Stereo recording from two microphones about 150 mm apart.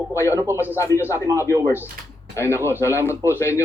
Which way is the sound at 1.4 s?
20° left (ahead or behind).